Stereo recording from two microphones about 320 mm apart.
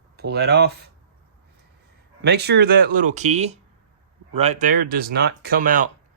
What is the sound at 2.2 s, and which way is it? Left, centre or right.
Speech, right.